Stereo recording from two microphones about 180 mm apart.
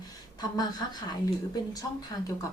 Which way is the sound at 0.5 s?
20° left (ahead or behind).